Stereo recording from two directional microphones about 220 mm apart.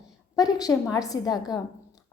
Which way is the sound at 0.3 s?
15° left (ahead or behind).